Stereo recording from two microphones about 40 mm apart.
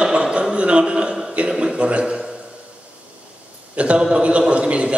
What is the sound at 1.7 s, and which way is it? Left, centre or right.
Speech, right.